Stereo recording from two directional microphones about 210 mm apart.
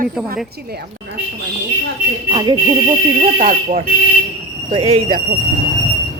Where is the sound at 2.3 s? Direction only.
20° right (ahead or behind).